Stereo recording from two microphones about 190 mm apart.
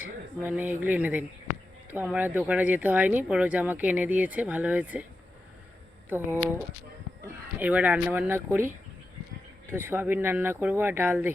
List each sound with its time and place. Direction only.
0.3 s speech: 10° right (ahead or behind)
6.1 s speech: 10° right (ahead or behind)
9.7 s speech: 10° right (ahead or behind)